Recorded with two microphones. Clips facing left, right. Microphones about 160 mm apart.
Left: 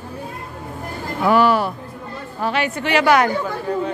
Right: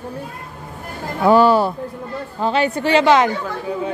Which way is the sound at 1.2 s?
30° right (ahead or behind).